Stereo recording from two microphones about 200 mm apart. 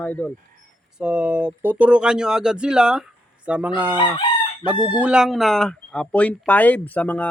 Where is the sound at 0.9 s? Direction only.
5° right (ahead or behind).